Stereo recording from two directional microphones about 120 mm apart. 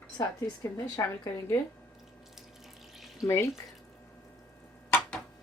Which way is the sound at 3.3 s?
25° left (ahead or behind).